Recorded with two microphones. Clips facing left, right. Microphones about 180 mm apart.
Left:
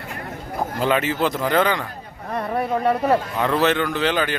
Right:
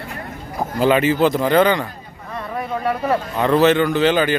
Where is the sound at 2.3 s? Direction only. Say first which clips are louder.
Left 3 dB; 40° left (ahead or behind).